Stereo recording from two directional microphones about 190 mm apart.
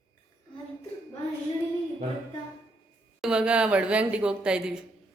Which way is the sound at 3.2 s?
5° right (ahead or behind).